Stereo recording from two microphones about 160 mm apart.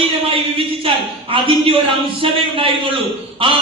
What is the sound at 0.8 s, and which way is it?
A man's voice, 35° right (ahead or behind).